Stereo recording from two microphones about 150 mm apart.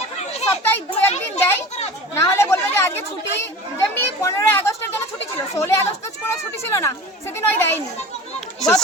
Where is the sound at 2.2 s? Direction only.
15° left (ahead or behind).